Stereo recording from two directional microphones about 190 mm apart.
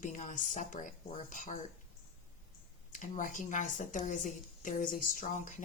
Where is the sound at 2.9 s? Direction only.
40° left (ahead or behind).